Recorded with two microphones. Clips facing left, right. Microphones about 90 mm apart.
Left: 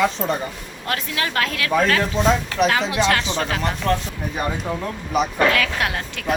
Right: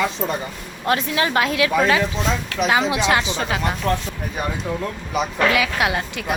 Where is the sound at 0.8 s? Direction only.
25° right (ahead or behind).